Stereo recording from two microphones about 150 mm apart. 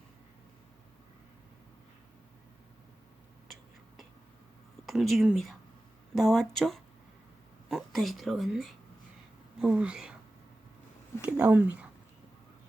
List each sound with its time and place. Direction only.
4.9 s a woman's voice: centre (ahead or behind)
11.2 s speech: 5° right (ahead or behind)